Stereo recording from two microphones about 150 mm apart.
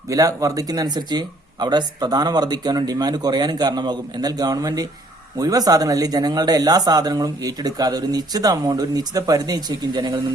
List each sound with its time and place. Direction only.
0.1 s speech: 20° right (ahead or behind)